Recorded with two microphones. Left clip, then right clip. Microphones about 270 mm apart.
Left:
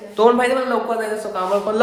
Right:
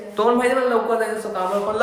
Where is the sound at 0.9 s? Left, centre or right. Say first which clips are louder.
Even; centre.